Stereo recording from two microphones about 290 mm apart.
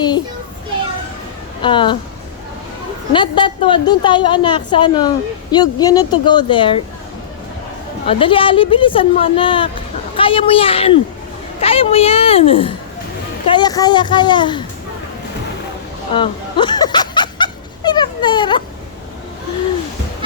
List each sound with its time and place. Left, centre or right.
1.6 s a woman's voice: centre
3.1 s a woman's voice: centre
8.0 s a woman's voice: centre
16.1 s snicker: centre